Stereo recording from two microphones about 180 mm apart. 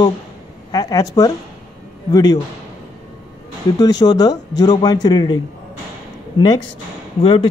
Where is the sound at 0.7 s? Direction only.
20° left (ahead or behind).